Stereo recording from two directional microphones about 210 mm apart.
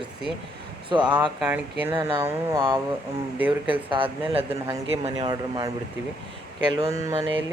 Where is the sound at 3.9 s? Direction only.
25° right (ahead or behind).